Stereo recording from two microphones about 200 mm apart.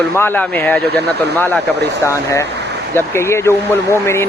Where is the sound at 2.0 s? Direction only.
15° left (ahead or behind).